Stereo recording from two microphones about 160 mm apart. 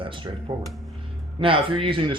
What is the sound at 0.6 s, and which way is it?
Speech, centre (ahead or behind).